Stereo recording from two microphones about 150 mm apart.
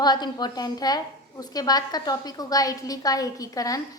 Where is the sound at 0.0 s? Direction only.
30° left (ahead or behind).